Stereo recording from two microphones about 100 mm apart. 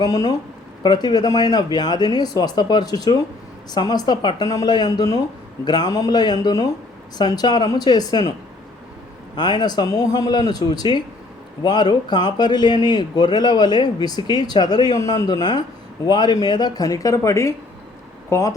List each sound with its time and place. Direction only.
0.0 s speech: 40° left (ahead or behind)
9.3 s speech: 45° left (ahead or behind); by 18.5 s 30° left (ahead or behind)